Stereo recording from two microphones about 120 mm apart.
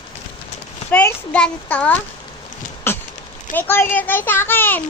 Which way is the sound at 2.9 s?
20° left (ahead or behind).